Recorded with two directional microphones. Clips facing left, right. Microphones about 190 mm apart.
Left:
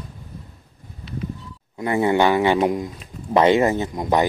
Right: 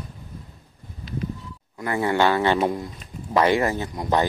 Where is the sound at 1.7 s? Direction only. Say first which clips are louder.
Left 4 dB; 20° left (ahead or behind).